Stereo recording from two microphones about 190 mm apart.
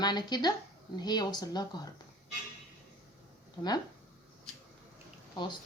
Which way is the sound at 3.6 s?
25° left (ahead or behind).